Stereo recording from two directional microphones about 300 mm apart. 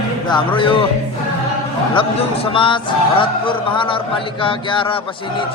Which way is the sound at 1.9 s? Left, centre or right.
Centre.